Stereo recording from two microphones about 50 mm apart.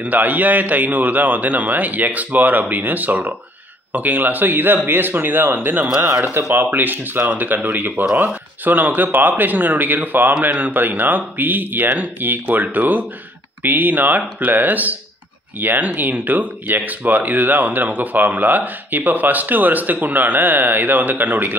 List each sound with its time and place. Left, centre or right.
0.0 s speech: right